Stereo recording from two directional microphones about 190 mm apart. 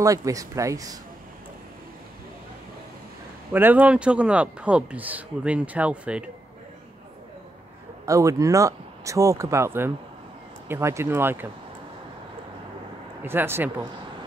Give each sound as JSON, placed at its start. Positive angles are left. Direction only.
{"t": 0.0, "sound": "speech", "side_deg": -15}
{"t": 3.5, "sound": "speech", "side_deg": -10}
{"t": 8.0, "sound": "speech", "side_deg": -15}
{"t": 13.2, "sound": "speech", "side_deg": -10}